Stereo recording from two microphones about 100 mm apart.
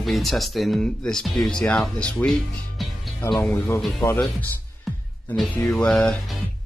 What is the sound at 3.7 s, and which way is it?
Speech, centre (ahead or behind).